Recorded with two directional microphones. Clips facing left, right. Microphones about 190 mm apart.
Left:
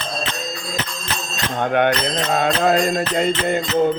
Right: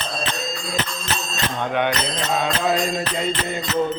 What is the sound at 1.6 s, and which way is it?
Mantra, 55° left (ahead or behind).